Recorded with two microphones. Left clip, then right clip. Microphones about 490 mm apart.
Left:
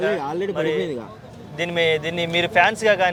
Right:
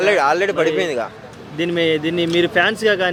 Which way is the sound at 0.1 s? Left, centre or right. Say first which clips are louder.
Right 9 dB; right.